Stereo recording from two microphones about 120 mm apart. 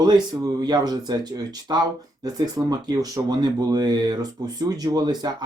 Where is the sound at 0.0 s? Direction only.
35° right (ahead or behind).